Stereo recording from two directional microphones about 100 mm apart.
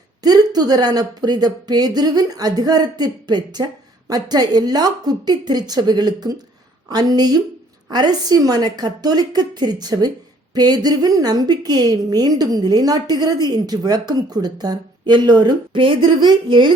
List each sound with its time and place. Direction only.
0.2 s a woman's voice: 40° right (ahead or behind)